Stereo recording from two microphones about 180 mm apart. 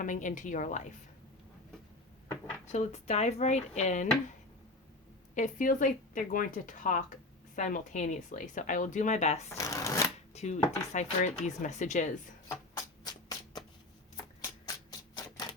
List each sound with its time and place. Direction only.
0.0 s speech: 45° left (ahead or behind)
2.7 s speech: 40° left (ahead or behind)
5.3 s speech: 45° left (ahead or behind)
9.6 s shuffling cards: 15° left (ahead or behind)
10.3 s speech: 40° left (ahead or behind)
12.5 s music: 20° left (ahead or behind)